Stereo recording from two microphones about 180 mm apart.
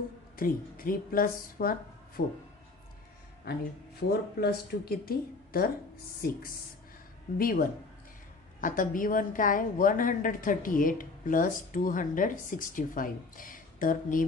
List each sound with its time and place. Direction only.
0.4 s a woman's voice: 50° left (ahead or behind)
4.1 s a woman's voice: 60° left (ahead or behind)